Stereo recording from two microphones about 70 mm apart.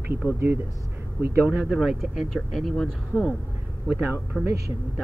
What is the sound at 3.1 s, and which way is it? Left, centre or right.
Speech, centre.